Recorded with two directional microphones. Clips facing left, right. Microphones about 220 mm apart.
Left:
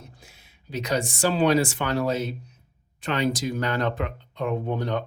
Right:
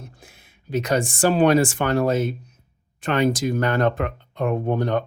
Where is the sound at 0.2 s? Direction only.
50° right (ahead or behind).